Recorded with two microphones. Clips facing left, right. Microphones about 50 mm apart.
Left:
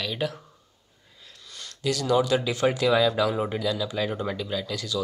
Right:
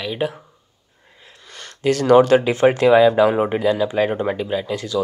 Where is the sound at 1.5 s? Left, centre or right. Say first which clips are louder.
Right 8 dB; right.